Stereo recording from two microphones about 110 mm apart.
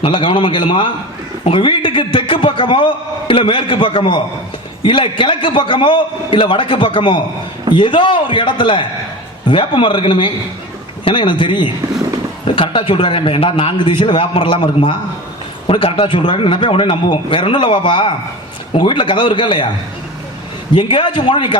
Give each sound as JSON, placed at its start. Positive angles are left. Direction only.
{"t": 0.0, "sound": "a man's voice", "side_deg": 50}
{"t": 20.7, "sound": "a man's voice", "side_deg": 50}